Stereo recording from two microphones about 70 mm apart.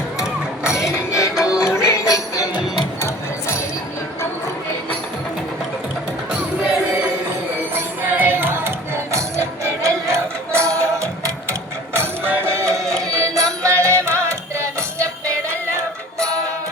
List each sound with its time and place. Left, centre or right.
0.8 s music: centre
1.1 s music: left
3.0 s music: left
8.0 s music: right
9.1 s music: right
11.9 s music: right
12.8 s carnatic music: centre
13.1 s music: right